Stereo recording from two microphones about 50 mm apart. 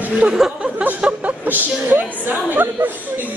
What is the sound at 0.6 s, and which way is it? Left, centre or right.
A woman's voice, right.